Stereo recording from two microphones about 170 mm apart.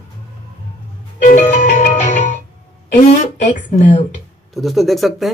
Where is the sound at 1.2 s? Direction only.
50° left (ahead or behind).